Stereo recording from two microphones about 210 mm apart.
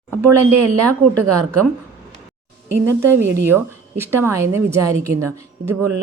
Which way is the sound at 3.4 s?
10° right (ahead or behind).